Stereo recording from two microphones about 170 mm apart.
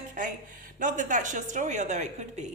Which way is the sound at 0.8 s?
50° right (ahead or behind).